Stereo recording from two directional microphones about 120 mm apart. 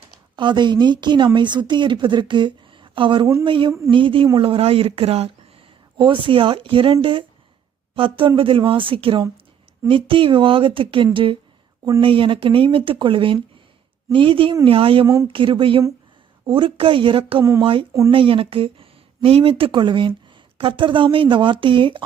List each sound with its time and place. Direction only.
0.3 s speech: 40° right (ahead or behind); by 5.3 s 55° right (ahead or behind)
6.0 s speech: 45° right (ahead or behind)
15.0 s speech: 30° right (ahead or behind)
15.3 s speech: 45° right (ahead or behind)